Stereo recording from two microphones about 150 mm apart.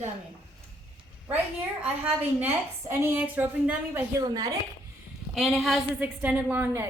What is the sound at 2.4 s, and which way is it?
A woman's voice, 15° right (ahead or behind).